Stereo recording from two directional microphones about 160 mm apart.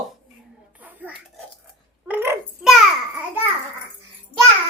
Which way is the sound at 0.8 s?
10° right (ahead or behind).